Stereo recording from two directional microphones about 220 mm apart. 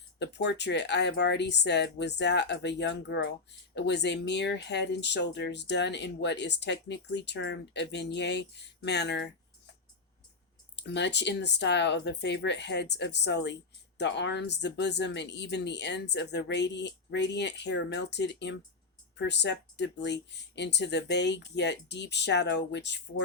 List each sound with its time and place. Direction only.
0.2 s speech: 50° left (ahead or behind)
10.8 s speech: 50° left (ahead or behind)